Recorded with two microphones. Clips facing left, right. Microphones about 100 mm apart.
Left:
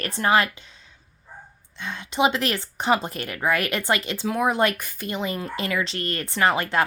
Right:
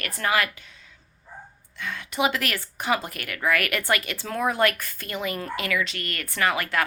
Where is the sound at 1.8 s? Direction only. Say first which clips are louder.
Left 3 dB; 25° left (ahead or behind).